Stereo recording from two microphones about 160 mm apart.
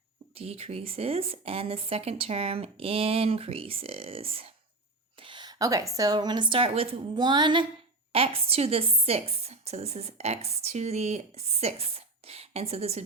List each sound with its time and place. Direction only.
0.3 s a woman's voice: 40° right (ahead or behind)